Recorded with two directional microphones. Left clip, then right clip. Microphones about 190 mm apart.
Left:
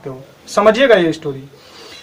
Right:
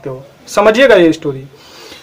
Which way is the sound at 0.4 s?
40° right (ahead or behind).